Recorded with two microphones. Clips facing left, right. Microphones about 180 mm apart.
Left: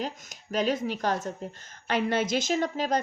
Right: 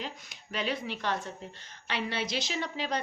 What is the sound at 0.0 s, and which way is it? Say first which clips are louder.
A woman's voice: left 6 dB; 45° left (ahead or behind).